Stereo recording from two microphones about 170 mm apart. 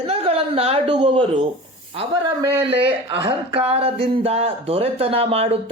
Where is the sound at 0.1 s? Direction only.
35° right (ahead or behind).